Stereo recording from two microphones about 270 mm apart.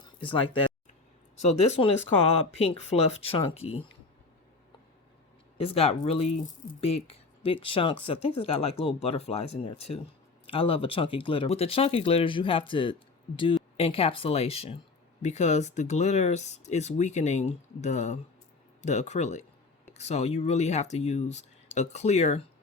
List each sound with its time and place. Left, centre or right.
0.3 s speech: centre
5.5 s speech: left